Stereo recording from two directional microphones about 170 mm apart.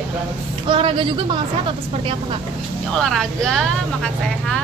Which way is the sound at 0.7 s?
30° right (ahead or behind).